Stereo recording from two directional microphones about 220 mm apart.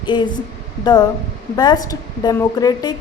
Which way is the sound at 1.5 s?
20° left (ahead or behind).